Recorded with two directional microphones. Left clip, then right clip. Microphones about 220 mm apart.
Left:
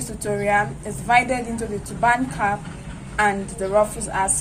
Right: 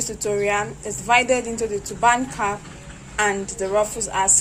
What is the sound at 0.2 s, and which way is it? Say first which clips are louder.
A woman's voice: left 2 dB; 30° right (ahead or behind).